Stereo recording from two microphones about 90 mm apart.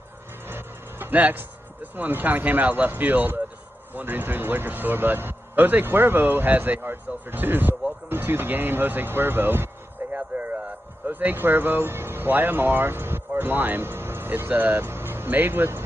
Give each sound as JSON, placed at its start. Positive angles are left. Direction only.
{"t": 0.5, "sound": "speech", "side_deg": -25}